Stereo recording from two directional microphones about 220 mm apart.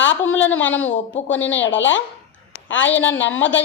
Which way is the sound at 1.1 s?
60° left (ahead or behind).